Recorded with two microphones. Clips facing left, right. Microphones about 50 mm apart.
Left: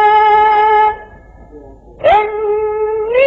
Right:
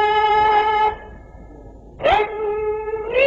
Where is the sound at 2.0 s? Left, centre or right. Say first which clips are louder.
Left 7 dB; centre.